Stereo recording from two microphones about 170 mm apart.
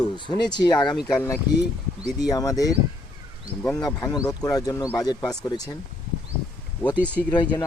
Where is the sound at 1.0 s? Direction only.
15° left (ahead or behind).